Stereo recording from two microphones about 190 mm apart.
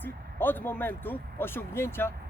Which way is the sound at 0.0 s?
10° left (ahead or behind).